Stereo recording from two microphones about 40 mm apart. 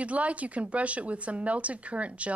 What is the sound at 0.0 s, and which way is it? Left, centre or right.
Speech, right.